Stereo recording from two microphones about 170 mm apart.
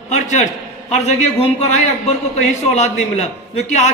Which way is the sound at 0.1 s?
45° left (ahead or behind).